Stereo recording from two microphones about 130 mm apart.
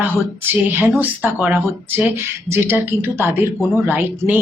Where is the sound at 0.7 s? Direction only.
15° right (ahead or behind).